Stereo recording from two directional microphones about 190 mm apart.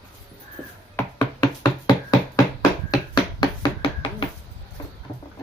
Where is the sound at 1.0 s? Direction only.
15° left (ahead or behind).